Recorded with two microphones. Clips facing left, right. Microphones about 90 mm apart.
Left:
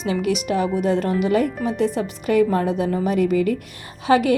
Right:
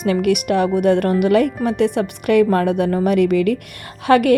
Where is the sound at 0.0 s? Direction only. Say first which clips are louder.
Right 5 dB; 60° right (ahead or behind).